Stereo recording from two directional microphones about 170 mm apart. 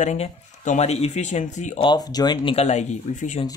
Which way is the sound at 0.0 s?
45° left (ahead or behind).